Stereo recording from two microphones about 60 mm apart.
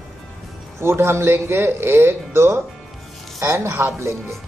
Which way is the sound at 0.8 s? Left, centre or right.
Right.